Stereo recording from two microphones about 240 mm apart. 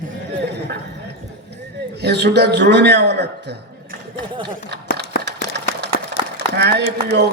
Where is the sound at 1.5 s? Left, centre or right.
Right.